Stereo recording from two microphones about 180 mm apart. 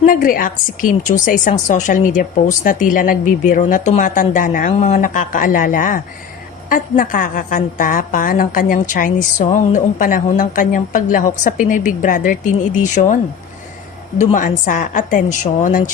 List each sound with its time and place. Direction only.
0.0 s a woman's voice: 50° left (ahead or behind)
14.3 s a woman's voice: 45° left (ahead or behind)